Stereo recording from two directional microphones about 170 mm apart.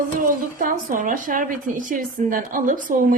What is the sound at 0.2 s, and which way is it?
Speech, 55° right (ahead or behind).